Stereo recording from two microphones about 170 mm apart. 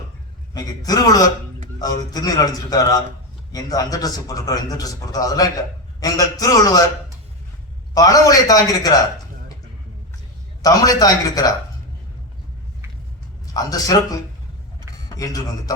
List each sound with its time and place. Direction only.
0.5 s a man's voice: 20° left (ahead or behind)
7.9 s a man's voice: 20° left (ahead or behind)
10.6 s a man's voice: 20° left (ahead or behind)
13.5 s a man's voice: 20° left (ahead or behind)